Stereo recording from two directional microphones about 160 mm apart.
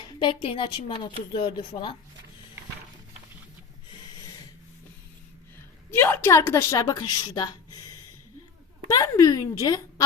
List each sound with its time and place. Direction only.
0.0 s speech: 30° left (ahead or behind)
6.0 s speech: 15° left (ahead or behind)
8.9 s speech: 20° left (ahead or behind)